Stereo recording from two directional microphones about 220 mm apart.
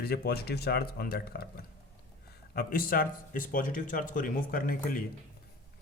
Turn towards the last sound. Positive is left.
turn(degrees=40)  # may be behind; listen again after turning